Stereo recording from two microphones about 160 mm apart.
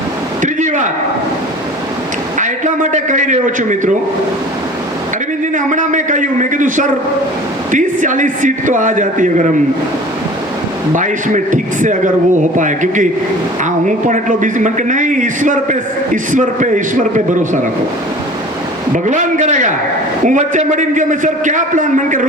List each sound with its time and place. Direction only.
0.4 s a sound: 50° right (ahead or behind)
2.4 s a man's voice: 50° right (ahead or behind)
5.5 s a man's voice: 55° right (ahead or behind)
10.9 s a man's voice: 55° right (ahead or behind)
18.9 s a man's voice: 50° right (ahead or behind)